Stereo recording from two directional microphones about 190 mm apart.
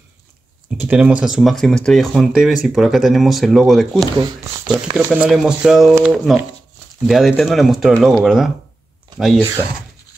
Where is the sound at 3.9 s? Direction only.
15° right (ahead or behind).